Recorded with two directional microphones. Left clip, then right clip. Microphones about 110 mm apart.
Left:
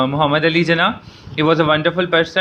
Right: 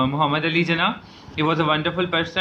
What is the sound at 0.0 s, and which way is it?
Speech, 45° left (ahead or behind).